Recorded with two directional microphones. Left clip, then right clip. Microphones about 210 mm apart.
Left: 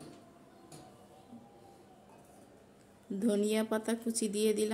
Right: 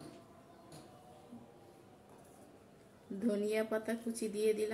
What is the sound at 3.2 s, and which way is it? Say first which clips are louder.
A woman's voice: left 3 dB; 55° left (ahead or behind).